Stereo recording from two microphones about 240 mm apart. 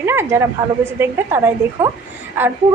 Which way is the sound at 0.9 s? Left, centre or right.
Centre.